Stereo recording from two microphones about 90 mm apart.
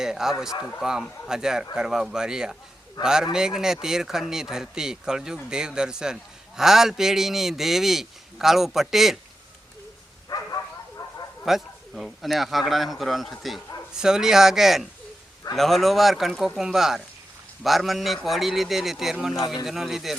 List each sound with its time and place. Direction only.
0.0 s a man's voice: 5° right (ahead or behind)
10.2 s bow-wow: 45° left (ahead or behind)
11.4 s a man's voice: centre (ahead or behind)